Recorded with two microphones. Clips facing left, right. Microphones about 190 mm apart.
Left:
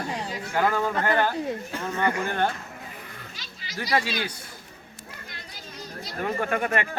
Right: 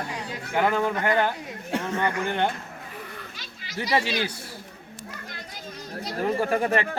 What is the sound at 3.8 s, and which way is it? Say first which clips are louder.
Speech: right 1 dB; 25° right (ahead or behind).